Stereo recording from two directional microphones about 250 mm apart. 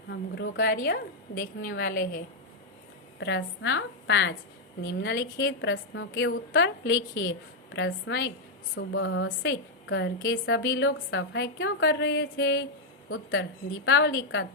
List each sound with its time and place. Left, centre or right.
0.1 s a woman's voice: left
3.2 s a woman's voice: left
13.8 s a woman's voice: left